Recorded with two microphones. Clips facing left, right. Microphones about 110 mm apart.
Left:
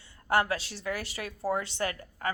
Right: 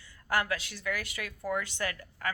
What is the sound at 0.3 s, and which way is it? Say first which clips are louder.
A woman's voice: left 4 dB; 30° left (ahead or behind).